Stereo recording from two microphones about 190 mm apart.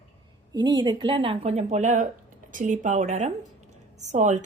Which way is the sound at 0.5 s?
25° right (ahead or behind).